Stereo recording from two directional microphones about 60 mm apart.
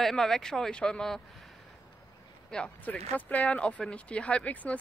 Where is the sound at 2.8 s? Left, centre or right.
Left.